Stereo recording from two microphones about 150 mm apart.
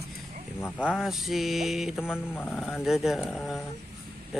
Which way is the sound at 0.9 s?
Centre (ahead or behind).